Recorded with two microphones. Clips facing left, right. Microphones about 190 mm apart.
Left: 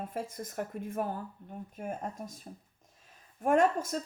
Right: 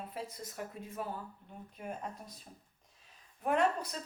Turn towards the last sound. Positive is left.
turn(degrees=45)  # may be behind; listen again after turning